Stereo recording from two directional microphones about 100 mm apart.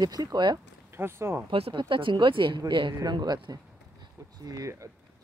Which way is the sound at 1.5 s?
60° right (ahead or behind).